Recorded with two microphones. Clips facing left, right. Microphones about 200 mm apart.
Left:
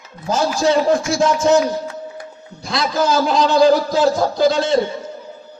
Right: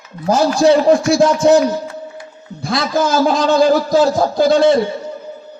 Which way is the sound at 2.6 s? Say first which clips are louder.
Right 2 dB; 50° right (ahead or behind).